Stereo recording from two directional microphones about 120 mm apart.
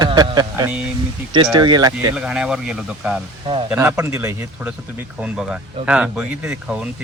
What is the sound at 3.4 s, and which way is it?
Speech, 45° right (ahead or behind).